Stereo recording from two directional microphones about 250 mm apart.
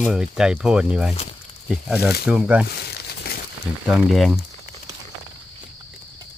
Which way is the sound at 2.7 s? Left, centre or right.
Left.